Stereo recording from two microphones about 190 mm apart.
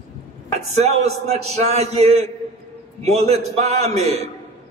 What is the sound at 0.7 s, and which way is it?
A man's voice, 35° right (ahead or behind).